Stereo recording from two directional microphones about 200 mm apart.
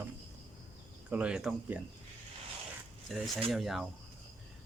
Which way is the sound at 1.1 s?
5° right (ahead or behind).